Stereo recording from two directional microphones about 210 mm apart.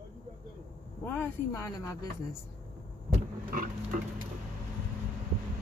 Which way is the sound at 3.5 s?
40° right (ahead or behind).